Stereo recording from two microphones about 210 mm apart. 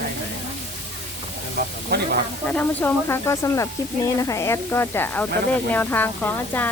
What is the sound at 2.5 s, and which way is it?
Speech, 10° left (ahead or behind).